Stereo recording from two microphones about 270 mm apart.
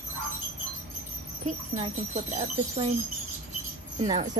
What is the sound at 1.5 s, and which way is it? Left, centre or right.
Speech, right.